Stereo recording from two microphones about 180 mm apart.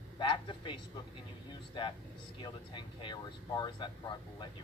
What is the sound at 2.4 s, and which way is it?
A man's voice, 25° left (ahead or behind).